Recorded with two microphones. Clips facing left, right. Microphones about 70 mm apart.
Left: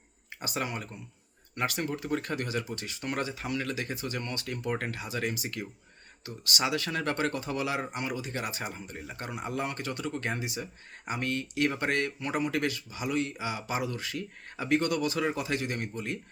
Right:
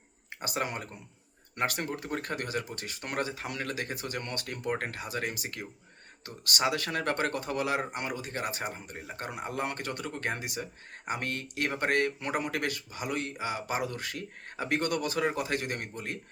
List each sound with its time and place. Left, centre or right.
0.3 s speech: right